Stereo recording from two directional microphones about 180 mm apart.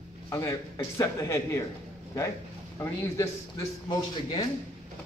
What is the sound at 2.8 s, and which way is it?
A man's voice, 15° left (ahead or behind).